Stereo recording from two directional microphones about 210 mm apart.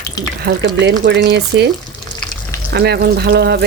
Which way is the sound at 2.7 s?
50° right (ahead or behind).